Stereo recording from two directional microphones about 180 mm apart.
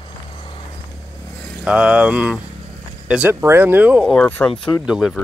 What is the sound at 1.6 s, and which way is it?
Speech, 5° right (ahead or behind).